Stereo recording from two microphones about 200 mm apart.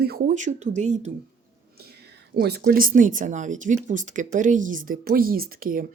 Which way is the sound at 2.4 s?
55° right (ahead or behind).